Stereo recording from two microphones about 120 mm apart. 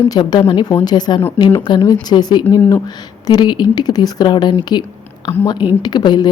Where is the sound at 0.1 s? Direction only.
35° left (ahead or behind).